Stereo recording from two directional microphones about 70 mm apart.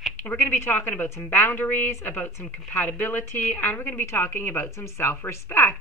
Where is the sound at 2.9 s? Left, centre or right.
Left.